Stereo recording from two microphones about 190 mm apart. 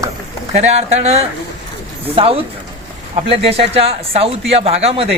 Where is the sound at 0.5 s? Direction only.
35° right (ahead or behind).